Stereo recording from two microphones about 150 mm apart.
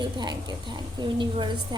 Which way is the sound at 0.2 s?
30° right (ahead or behind).